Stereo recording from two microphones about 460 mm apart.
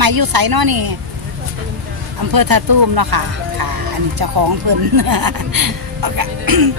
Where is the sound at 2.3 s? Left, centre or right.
Right.